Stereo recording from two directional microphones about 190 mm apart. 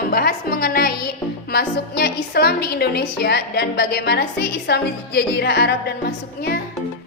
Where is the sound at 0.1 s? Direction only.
50° left (ahead or behind).